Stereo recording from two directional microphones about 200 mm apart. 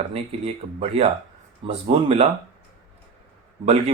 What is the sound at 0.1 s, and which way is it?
Speech, 30° right (ahead or behind).